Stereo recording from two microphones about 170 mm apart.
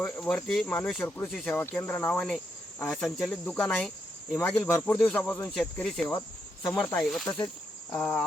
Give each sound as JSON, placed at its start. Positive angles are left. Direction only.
{"t": 0.0, "sound": "cricket", "side_deg": 10}
{"t": 6.7, "sound": "speech", "side_deg": 5}
{"t": 7.3, "sound": "cricket", "side_deg": 25}
{"t": 7.9, "sound": "cricket", "side_deg": 15}